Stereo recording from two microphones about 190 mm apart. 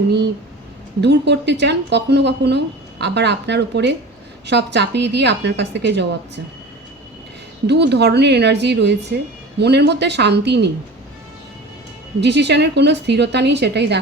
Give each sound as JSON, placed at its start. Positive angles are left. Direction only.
{"t": 1.0, "sound": "a woman's voice", "side_deg": -65}
{"t": 7.7, "sound": "a woman's voice", "side_deg": -65}
{"t": 12.2, "sound": "a woman's voice", "side_deg": -65}